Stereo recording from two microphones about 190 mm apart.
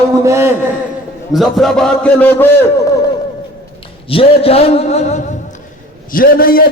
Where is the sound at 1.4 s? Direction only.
Centre (ahead or behind).